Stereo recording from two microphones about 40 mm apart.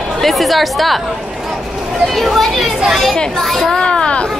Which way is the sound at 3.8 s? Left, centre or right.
Left.